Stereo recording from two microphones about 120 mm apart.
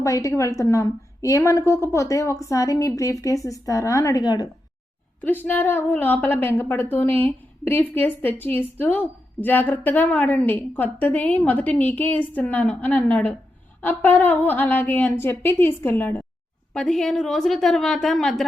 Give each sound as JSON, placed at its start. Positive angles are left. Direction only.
{"t": 0.0, "sound": "a woman's voice", "side_deg": 25}
{"t": 5.2, "sound": "a woman's voice", "side_deg": 15}
{"t": 16.7, "sound": "a woman's voice", "side_deg": 5}